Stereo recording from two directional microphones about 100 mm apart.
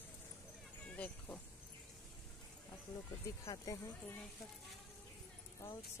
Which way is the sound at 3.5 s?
40° left (ahead or behind).